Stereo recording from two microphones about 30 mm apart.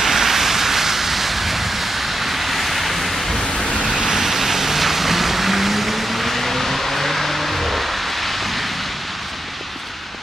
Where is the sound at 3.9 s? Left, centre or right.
Centre.